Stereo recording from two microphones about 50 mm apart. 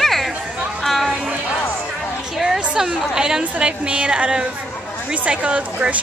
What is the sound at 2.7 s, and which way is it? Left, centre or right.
A woman's voice, centre.